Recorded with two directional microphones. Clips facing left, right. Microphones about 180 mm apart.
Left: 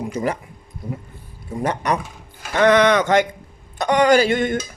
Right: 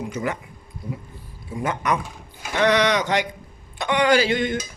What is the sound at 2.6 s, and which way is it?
Speech, 50° left (ahead or behind).